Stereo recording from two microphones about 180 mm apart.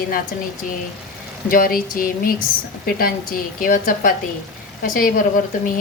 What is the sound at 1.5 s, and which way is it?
A woman's voice, 50° left (ahead or behind).